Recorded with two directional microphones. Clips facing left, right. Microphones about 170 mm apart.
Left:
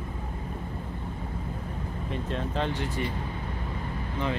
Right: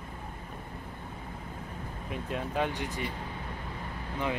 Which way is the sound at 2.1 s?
10° right (ahead or behind).